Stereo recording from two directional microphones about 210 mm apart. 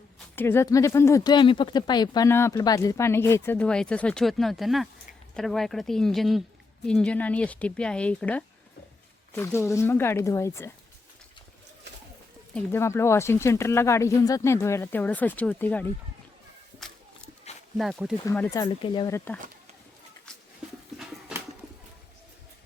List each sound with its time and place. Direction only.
0.3 s speech: 10° left (ahead or behind)
12.5 s speech: 10° left (ahead or behind)
17.7 s speech: centre (ahead or behind)
18.3 s speech: 10° left (ahead or behind)